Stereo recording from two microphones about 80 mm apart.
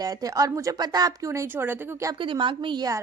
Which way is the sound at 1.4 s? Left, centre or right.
Right.